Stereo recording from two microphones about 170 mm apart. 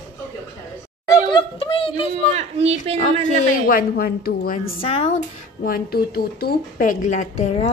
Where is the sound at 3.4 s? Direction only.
55° left (ahead or behind).